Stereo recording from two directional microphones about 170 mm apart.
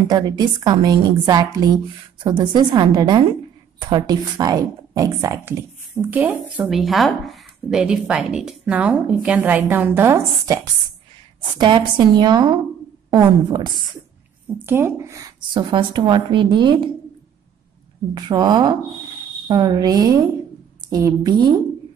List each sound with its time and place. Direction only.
0.1 s a woman's voice: 25° right (ahead or behind)
5.9 s a woman's voice: 10° right (ahead or behind); by 13.8 s 25° right (ahead or behind)
14.7 s a woman's voice: 15° right (ahead or behind)
18.1 s a woman's voice: 25° right (ahead or behind)